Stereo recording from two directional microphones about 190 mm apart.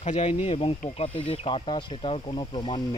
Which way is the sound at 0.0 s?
35° left (ahead or behind).